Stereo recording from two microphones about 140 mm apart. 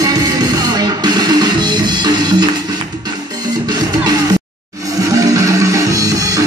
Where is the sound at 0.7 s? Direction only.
30° right (ahead or behind).